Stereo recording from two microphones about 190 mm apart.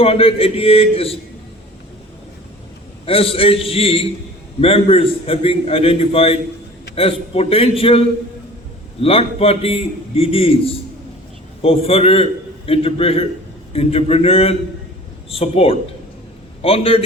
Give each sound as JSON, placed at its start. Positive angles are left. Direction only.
{"t": 0.0, "sound": "a man's voice", "side_deg": 30}
{"t": 3.1, "sound": "a man's voice", "side_deg": 30}